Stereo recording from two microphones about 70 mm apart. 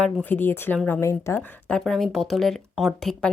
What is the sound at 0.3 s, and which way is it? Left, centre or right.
Speech, left.